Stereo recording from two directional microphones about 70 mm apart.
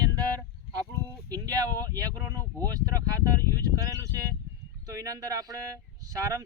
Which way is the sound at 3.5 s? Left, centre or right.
Right.